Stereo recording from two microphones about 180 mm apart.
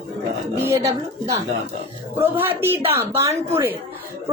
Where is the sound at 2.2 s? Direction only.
10° right (ahead or behind).